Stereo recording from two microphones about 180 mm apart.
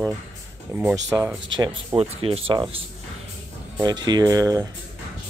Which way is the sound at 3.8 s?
25° right (ahead or behind).